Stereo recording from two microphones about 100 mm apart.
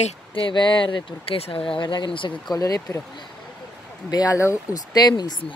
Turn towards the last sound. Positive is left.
turn(degrees=45)  # may be behind; listen again after turning